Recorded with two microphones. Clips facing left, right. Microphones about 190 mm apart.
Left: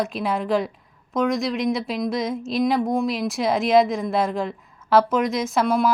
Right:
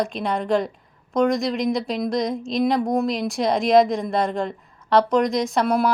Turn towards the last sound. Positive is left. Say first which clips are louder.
# even
turn(degrees=0)  # may be behind; listen again after turning